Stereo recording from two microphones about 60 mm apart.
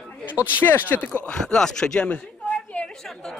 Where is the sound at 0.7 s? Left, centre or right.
Left.